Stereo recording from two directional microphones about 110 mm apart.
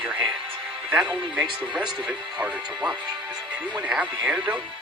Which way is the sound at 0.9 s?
10° right (ahead or behind).